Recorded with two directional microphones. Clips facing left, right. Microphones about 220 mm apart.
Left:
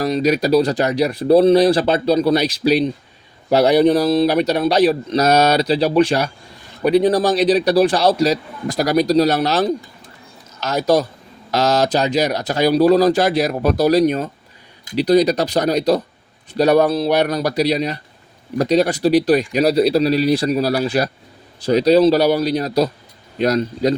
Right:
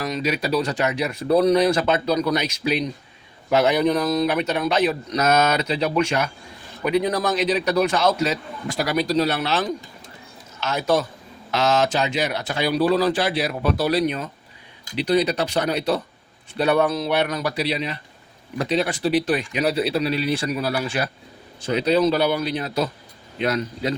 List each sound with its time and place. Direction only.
0.0 s a man's voice: 40° left (ahead or behind)